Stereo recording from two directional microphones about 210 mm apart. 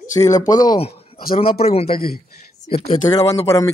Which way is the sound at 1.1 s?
45° left (ahead or behind).